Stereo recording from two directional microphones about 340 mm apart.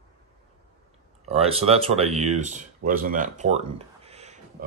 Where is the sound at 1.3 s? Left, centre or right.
Centre.